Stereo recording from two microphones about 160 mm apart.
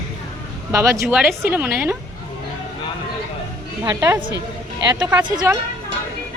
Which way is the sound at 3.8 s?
15° right (ahead or behind).